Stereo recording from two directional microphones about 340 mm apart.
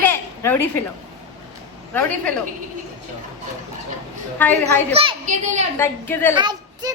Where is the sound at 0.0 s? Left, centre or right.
Centre.